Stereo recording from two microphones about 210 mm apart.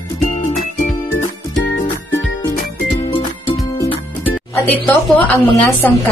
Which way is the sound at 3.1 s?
25° left (ahead or behind).